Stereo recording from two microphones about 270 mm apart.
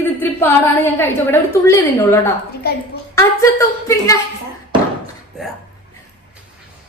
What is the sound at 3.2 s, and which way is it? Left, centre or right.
A woman's voice, centre.